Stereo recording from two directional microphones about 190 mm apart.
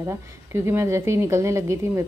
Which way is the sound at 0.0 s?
15° right (ahead or behind).